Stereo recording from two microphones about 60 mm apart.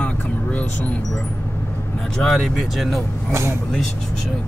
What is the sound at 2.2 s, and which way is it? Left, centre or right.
Speech, centre.